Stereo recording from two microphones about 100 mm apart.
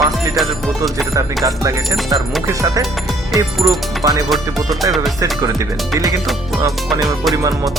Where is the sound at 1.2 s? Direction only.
30° right (ahead or behind).